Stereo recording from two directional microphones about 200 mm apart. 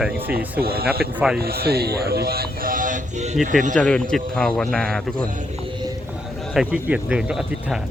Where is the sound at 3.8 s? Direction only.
5° left (ahead or behind).